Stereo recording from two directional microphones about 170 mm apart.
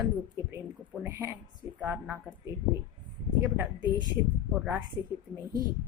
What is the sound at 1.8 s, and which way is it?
Speech, 10° right (ahead or behind).